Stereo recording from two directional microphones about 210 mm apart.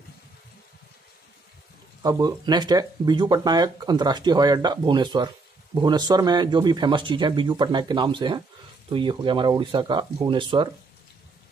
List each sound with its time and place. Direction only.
2.0 s speech: 20° right (ahead or behind)